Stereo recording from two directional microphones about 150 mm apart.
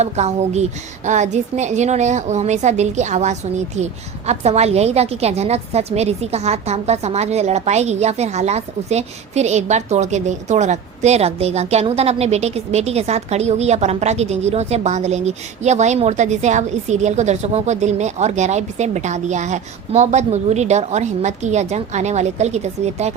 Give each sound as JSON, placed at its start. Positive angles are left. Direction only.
{"t": 0.0, "sound": "a woman's voice", "side_deg": -50}